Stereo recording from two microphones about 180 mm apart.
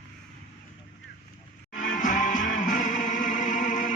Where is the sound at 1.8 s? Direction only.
45° left (ahead or behind).